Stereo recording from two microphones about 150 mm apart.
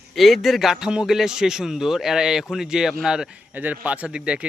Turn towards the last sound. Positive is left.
turn(degrees=-5)  # may be behind; listen again after turning